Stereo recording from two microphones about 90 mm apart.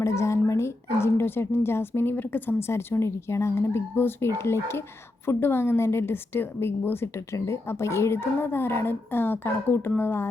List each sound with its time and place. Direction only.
0.0 s a woman's voice: 35° left (ahead or behind)